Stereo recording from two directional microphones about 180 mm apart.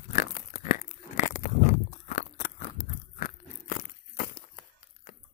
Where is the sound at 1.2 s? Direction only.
45° left (ahead or behind).